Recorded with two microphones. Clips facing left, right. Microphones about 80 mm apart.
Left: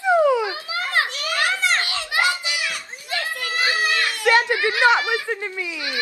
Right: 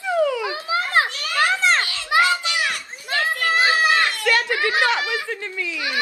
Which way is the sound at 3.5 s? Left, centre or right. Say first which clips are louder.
Right 4 dB; right.